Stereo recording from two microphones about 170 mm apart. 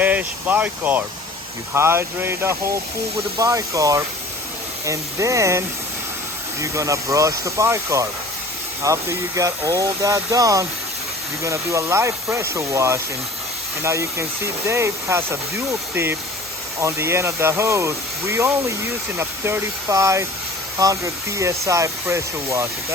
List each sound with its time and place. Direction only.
0.0 s speech: 10° right (ahead or behind)